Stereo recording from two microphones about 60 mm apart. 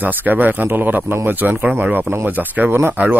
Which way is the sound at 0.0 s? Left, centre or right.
Right.